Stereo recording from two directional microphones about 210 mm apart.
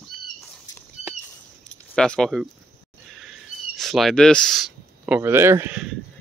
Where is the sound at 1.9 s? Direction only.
5° left (ahead or behind).